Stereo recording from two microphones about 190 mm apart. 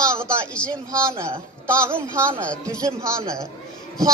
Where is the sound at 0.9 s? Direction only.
15° right (ahead or behind).